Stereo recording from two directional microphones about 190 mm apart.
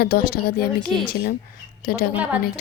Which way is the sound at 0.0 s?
50° left (ahead or behind).